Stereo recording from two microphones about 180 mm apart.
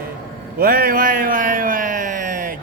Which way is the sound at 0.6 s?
55° right (ahead or behind).